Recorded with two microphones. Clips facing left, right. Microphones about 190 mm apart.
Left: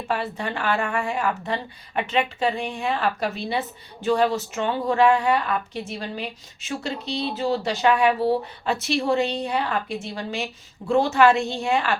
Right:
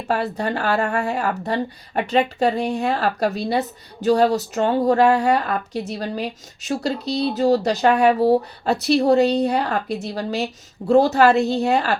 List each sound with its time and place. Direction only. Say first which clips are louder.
0.3 s speech: right 4 dB; 40° right (ahead or behind)